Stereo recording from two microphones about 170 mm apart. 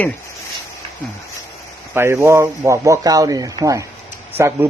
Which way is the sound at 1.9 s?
15° right (ahead or behind).